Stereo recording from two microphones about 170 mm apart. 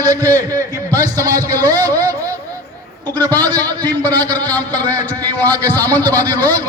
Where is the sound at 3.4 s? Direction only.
25° right (ahead or behind).